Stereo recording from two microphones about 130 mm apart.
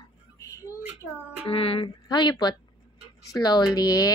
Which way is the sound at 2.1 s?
35° left (ahead or behind).